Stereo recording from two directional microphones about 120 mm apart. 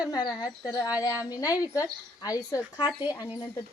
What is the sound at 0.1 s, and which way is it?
A woman's voice, 40° left (ahead or behind).